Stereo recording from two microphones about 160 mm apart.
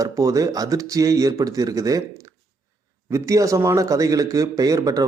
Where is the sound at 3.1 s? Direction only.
20° right (ahead or behind).